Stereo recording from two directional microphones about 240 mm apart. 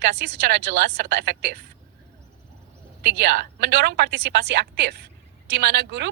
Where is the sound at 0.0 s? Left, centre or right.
Right.